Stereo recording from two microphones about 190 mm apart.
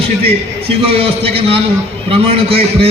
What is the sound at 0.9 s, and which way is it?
A man's voice, 30° right (ahead or behind).